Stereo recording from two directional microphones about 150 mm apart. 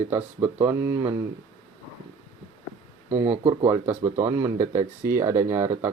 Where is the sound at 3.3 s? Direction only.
45° right (ahead or behind).